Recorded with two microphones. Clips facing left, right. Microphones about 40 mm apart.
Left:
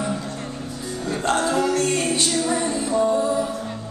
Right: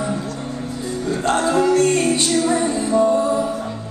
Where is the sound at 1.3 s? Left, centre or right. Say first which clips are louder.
Right 6 dB; centre.